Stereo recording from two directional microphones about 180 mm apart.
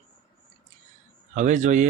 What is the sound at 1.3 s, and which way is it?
Speech, 45° right (ahead or behind).